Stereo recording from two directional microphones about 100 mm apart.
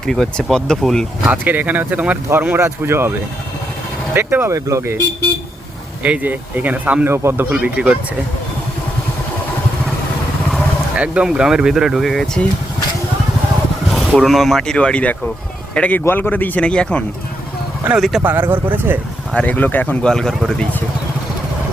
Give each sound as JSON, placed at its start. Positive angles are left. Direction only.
{"t": 0.0, "sound": "speech", "side_deg": 5}
{"t": 1.2, "sound": "speech", "side_deg": -15}
{"t": 4.1, "sound": "speech", "side_deg": -20}
{"t": 4.5, "sound": "speech", "side_deg": -30}
{"t": 6.0, "sound": "speech", "side_deg": -15}
{"t": 10.9, "sound": "speech", "side_deg": -10}
{"t": 14.2, "sound": "speech", "side_deg": 0}
{"t": 17.9, "sound": "speech", "side_deg": 0}
{"t": 18.2, "sound": "speech", "side_deg": -20}
{"t": 19.3, "sound": "speech", "side_deg": 15}